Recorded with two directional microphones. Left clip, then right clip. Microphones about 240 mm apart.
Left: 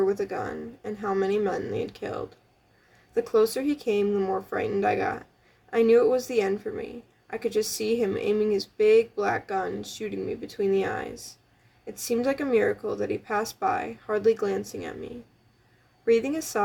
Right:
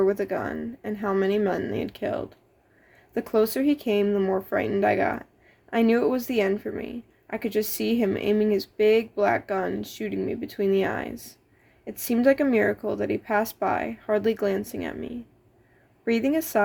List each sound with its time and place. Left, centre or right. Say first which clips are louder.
0.0 s speech: right 2 dB; right
16.0 s speech: left 1 dB; right